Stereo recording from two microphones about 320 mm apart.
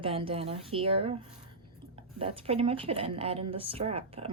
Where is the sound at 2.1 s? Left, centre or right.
Centre.